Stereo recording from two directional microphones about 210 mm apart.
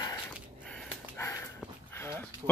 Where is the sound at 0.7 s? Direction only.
10° left (ahead or behind).